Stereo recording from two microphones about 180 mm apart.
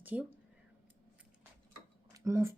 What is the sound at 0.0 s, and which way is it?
Speech, 10° right (ahead or behind).